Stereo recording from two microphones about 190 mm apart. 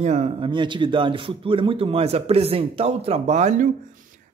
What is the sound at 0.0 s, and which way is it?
Speech, 35° right (ahead or behind).